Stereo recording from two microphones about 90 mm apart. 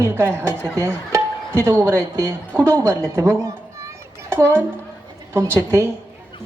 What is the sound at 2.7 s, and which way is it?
A woman's voice, 40° right (ahead or behind).